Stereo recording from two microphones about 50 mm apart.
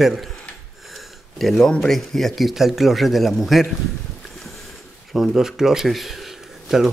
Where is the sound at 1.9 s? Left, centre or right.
Centre.